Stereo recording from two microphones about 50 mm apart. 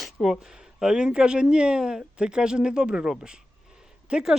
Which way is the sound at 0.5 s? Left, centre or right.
Centre.